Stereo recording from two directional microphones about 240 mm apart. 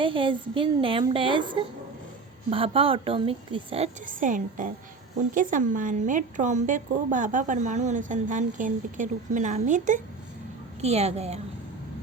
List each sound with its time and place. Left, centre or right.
0.0 s a woman's voice: right